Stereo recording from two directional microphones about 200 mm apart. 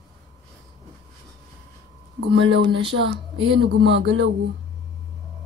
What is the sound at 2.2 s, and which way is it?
Speech, 60° right (ahead or behind).